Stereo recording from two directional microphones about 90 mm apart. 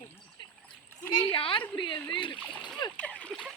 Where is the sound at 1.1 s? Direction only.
85° left.